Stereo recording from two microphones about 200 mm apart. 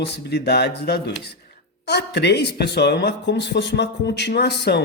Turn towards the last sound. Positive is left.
turn(degrees=55)  # may be behind; listen again after turning